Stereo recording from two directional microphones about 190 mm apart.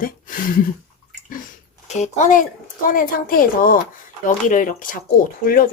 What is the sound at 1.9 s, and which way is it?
A woman's voice, 40° left (ahead or behind).